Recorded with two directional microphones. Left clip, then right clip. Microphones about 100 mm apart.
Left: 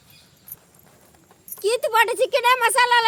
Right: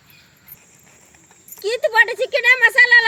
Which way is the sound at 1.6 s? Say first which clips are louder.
Right 3 dB; 50° left (ahead or behind).